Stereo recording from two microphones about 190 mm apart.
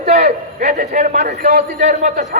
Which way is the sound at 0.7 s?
45° right (ahead or behind).